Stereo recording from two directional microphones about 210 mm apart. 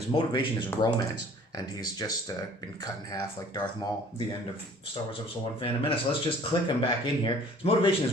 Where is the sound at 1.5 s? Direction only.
15° left (ahead or behind).